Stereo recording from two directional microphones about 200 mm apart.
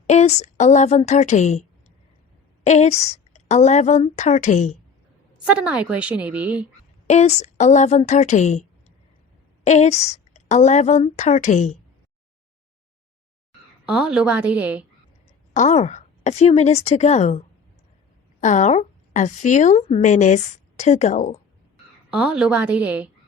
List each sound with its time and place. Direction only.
0.1 s a woman's voice: 35° left (ahead or behind)
2.6 s a woman's voice: 35° left (ahead or behind)
5.5 s a woman's voice: 5° right (ahead or behind)
7.1 s a woman's voice: 35° left (ahead or behind)
9.6 s a woman's voice: 35° left (ahead or behind)
13.8 s a woman's voice: 5° right (ahead or behind)
15.5 s a woman's voice: 35° left (ahead or behind)
22.1 s a woman's voice: 5° right (ahead or behind)